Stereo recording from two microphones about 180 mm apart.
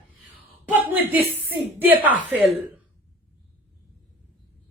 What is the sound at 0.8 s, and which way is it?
A woman's voice, 10° right (ahead or behind).